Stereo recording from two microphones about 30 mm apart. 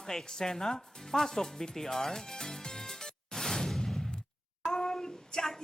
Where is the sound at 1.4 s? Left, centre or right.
Centre.